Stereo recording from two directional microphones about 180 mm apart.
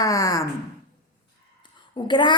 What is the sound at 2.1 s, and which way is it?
Speech, 25° left (ahead or behind).